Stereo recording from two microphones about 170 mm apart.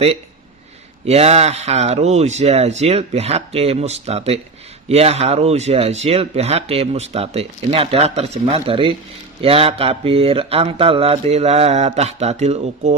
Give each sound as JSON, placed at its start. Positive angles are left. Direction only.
{"t": 1.0, "sound": "speech", "side_deg": -40}